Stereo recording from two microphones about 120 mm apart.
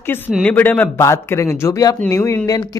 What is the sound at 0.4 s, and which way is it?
Speech, 15° left (ahead or behind).